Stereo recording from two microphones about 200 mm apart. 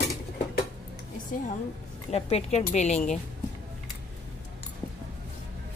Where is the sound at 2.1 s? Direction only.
30° left (ahead or behind).